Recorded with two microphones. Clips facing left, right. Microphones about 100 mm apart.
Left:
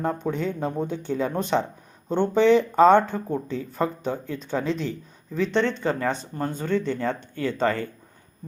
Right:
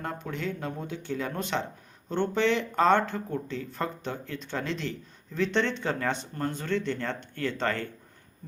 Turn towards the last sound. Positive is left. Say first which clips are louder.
# left 5 dB
turn(degrees=5)  # may be behind; listen again after turning